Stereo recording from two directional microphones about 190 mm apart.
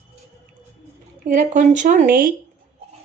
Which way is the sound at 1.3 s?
40° right (ahead or behind).